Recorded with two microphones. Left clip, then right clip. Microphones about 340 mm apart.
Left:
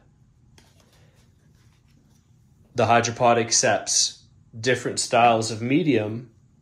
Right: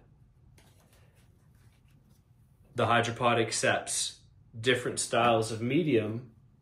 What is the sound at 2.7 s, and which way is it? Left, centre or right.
Speech, centre.